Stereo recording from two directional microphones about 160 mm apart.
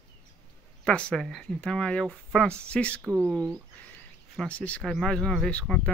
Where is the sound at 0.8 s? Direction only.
5° left (ahead or behind).